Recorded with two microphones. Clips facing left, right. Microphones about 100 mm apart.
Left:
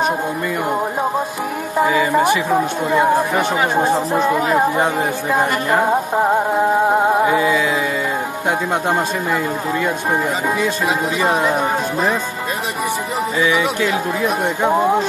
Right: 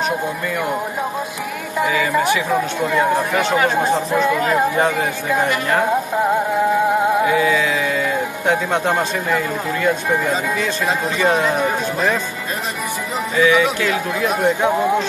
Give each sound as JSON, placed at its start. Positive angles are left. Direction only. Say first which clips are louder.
{"t": 2.0, "sound": "speech", "louder": "left 1 dB", "side_deg": 20}
{"t": 7.1, "sound": "music", "louder": "left 1 dB", "side_deg": 30}
{"t": 8.5, "sound": "speech", "louder": "right 1 dB", "side_deg": 15}
{"t": 11.3, "sound": "speech", "louder": "left 1 dB", "side_deg": 15}
{"t": 14.2, "sound": "speech", "louder": "right 3 dB", "side_deg": 0}